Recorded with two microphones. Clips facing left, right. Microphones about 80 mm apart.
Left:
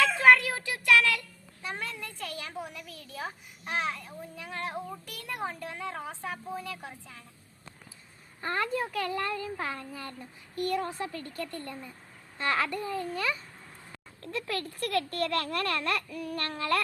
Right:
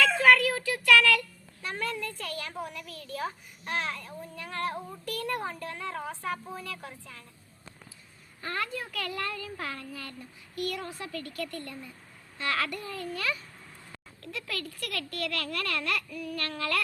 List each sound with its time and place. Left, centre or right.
0.0 s a sound: left
1.6 s a woman's voice: centre
8.4 s a woman's voice: left
14.2 s a child's voice: left